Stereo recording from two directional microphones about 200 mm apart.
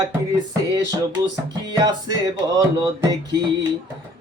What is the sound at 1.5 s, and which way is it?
Speech, 20° right (ahead or behind).